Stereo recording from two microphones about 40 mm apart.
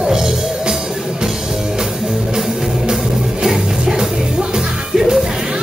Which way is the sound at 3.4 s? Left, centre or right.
Centre.